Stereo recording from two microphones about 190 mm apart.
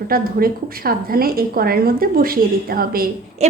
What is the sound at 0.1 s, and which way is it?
A woman's voice, 50° right (ahead or behind).